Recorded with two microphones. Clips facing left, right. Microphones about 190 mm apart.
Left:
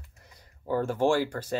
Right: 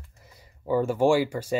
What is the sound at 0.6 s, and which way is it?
Speech, 10° right (ahead or behind).